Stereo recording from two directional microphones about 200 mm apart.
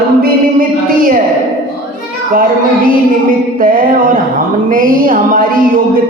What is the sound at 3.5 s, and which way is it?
Music, 45° right (ahead or behind).